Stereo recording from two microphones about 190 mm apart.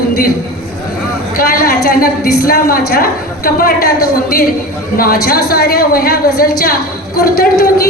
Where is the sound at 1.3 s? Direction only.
50° left (ahead or behind).